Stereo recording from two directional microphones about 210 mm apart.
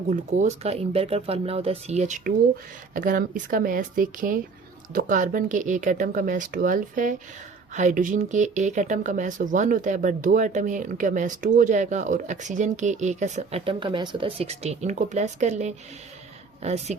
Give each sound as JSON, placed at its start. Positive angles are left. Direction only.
{"t": 0.1, "sound": "speech", "side_deg": -35}